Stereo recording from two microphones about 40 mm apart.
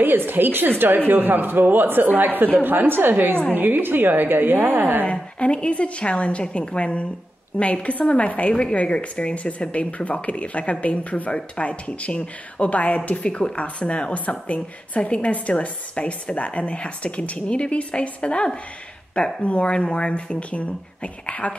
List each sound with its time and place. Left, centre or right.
0.0 s a woman's voice: right
5.1 s a woman's voice: left